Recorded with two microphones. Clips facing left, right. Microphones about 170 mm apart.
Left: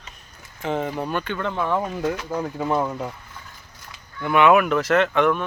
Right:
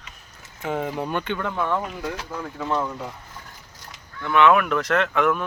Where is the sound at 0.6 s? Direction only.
5° right (ahead or behind).